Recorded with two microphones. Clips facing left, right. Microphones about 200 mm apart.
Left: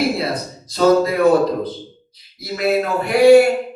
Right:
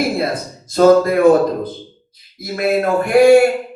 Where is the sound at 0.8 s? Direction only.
50° right (ahead or behind).